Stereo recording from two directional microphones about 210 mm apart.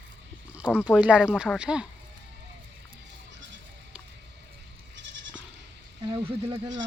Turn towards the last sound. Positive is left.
turn(degrees=-25)  # may be behind; listen again after turning